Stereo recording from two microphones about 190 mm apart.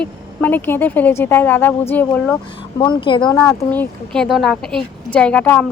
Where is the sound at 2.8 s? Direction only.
25° left (ahead or behind).